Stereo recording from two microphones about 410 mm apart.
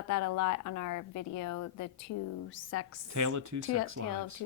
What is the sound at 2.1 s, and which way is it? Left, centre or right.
Speech, left.